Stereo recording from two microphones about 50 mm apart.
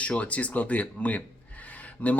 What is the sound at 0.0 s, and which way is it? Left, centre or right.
Speech, left.